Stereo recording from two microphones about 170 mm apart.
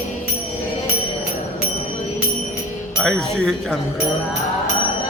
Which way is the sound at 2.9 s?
Centre (ahead or behind).